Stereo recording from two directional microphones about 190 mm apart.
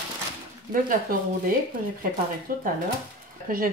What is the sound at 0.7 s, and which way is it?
Speech, 50° right (ahead or behind).